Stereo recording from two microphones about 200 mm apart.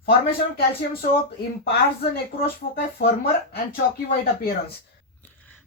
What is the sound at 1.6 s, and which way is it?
Speech, 50° left (ahead or behind).